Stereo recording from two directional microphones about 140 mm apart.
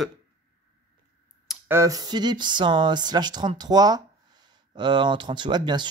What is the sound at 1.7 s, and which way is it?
Speech, 25° right (ahead or behind).